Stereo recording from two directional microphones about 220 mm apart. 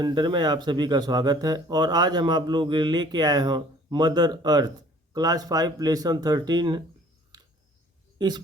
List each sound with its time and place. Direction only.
0.0 s speech: 20° right (ahead or behind)